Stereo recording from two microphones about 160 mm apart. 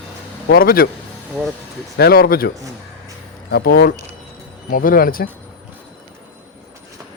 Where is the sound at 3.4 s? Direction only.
80° left; by 5.2 s 65° left (ahead or behind).